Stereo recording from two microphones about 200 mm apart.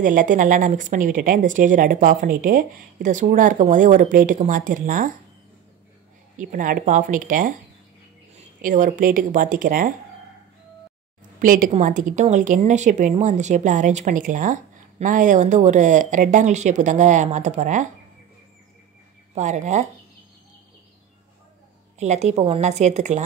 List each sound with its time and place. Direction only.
0.0 s a woman's voice: 40° right (ahead or behind)
6.5 s a woman's voice: 40° right (ahead or behind)
11.3 s a woman's voice: 45° right (ahead or behind)
19.3 s a woman's voice: 35° right (ahead or behind)
21.9 s a woman's voice: 35° right (ahead or behind)